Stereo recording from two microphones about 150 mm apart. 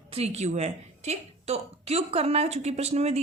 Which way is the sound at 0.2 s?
50° right (ahead or behind).